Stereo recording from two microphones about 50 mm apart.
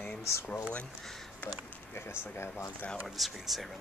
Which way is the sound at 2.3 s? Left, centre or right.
Left.